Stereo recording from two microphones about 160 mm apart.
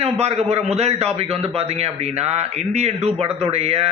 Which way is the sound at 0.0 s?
40° right (ahead or behind).